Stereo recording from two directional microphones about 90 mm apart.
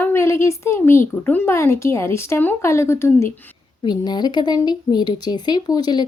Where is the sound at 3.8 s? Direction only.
50° left (ahead or behind).